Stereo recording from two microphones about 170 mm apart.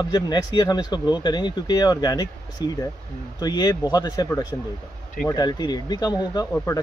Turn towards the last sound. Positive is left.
turn(degrees=15)  # may be behind; listen again after turning